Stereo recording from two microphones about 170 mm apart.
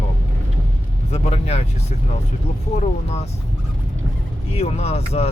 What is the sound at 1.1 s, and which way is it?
Speech, 40° left (ahead or behind).